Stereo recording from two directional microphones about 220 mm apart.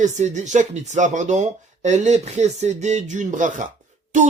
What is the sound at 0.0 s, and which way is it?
Speech, 30° right (ahead or behind).